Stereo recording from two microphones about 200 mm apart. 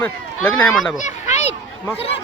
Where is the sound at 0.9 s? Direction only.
40° left (ahead or behind).